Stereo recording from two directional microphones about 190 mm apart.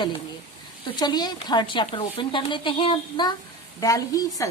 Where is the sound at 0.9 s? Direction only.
20° left (ahead or behind).